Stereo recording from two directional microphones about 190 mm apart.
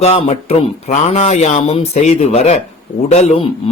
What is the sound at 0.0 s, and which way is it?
A man's voice, 35° left (ahead or behind).